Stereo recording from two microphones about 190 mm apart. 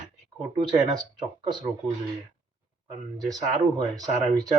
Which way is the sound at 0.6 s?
20° right (ahead or behind).